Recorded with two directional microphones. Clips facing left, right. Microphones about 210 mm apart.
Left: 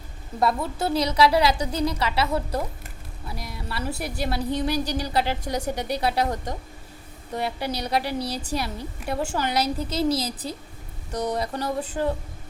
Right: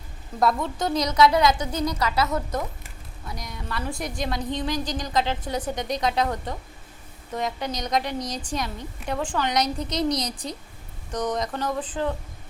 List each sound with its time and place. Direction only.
0.4 s a woman's voice: 5° left (ahead or behind)
0.9 s a woman's voice: 30° left (ahead or behind)
3.3 s a woman's voice: 5° left (ahead or behind)
7.3 s a woman's voice: 10° left (ahead or behind)